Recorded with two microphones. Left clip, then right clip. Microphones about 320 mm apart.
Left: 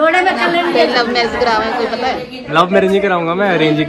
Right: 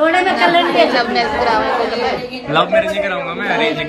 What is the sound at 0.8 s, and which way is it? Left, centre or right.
Speech, left.